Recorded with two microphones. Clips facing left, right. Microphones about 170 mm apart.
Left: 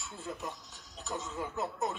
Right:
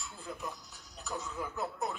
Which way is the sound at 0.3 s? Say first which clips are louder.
Left 1 dB; 20° left (ahead or behind).